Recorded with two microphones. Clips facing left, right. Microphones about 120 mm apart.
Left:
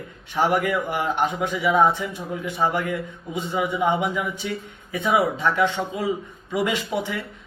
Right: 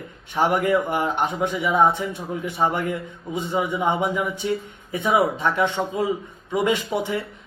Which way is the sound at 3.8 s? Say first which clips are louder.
Even; 25° right (ahead or behind).